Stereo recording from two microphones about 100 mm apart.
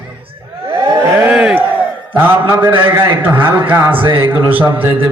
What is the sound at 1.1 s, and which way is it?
A man's voice, 10° right (ahead or behind).